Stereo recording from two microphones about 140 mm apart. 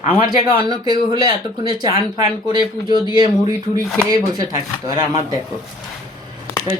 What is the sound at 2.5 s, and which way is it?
Speech, 30° right (ahead or behind).